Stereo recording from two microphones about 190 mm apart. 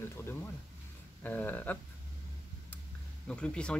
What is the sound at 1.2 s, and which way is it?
Speech, 10° left (ahead or behind).